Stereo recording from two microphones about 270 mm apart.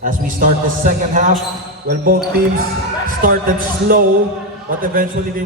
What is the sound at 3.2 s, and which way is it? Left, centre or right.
A man's voice, right.